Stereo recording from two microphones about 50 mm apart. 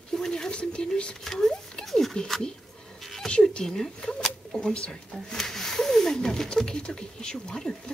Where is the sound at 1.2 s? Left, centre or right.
Centre.